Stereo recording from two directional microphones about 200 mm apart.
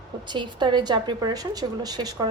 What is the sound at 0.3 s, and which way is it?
A woman's voice, 25° right (ahead or behind).